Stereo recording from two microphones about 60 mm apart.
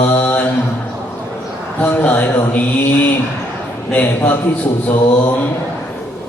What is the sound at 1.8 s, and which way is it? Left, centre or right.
Mantra, left.